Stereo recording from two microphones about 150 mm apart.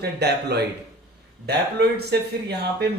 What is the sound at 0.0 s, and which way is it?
A man's voice, 90° right.